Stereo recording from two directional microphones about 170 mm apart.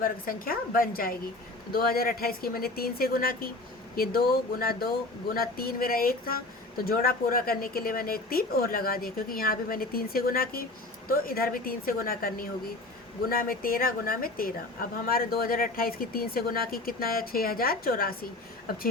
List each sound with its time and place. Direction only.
0.0 s a woman's voice: 60° left (ahead or behind)